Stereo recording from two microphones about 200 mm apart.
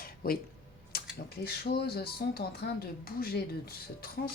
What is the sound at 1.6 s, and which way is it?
Speech, 50° left (ahead or behind).